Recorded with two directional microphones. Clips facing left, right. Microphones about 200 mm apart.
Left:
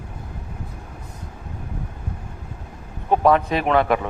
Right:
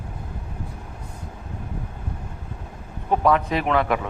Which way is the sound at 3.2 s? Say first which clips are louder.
Left 2 dB; 35° left (ahead or behind).